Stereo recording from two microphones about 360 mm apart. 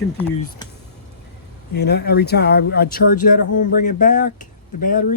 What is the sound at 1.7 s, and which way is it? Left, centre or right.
Speech, left.